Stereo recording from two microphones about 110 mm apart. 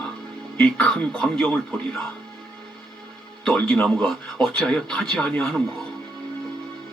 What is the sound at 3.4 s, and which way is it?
A man's voice, 10° left (ahead or behind).